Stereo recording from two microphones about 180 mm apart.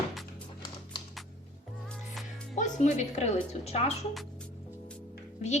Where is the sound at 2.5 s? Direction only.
40° left (ahead or behind).